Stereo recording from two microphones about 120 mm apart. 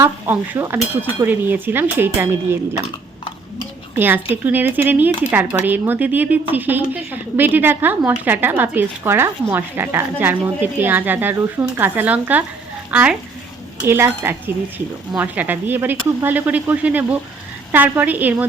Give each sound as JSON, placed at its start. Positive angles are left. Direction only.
{"t": 0.0, "sound": "speech", "side_deg": -20}
{"t": 3.9, "sound": "speech", "side_deg": -15}
{"t": 15.1, "sound": "speech", "side_deg": -15}